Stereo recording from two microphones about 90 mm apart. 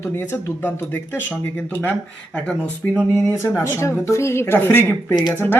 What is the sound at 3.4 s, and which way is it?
Speech, 30° left (ahead or behind).